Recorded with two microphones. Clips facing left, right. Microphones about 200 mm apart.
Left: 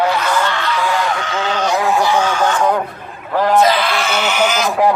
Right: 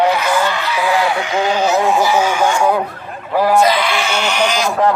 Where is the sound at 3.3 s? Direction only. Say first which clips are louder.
Right 1 dB; 10° right (ahead or behind).